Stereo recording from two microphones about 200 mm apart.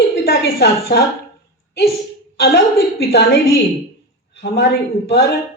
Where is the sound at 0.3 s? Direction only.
50° left (ahead or behind).